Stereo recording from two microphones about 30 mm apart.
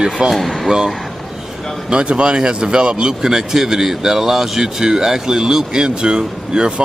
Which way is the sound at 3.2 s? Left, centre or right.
Centre.